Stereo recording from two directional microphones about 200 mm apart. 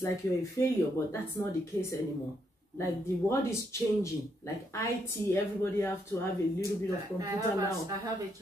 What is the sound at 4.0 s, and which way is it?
A woman's voice, 15° left (ahead or behind).